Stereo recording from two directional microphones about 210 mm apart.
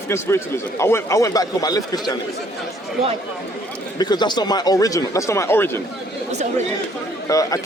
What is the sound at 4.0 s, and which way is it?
A man's voice, 20° left (ahead or behind).